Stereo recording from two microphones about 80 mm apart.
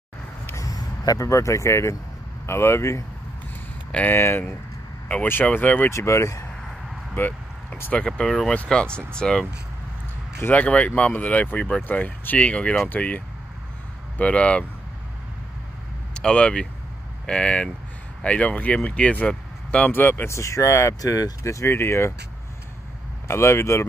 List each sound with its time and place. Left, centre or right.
0.6 s speech: left
4.1 s speech: left
5.0 s speech: centre
5.9 s speech: left
7.2 s speech: left
8.2 s speech: centre
10.5 s speech: centre
16.1 s speech: centre
19.9 s speech: left
20.2 s speech: left
23.2 s speech: left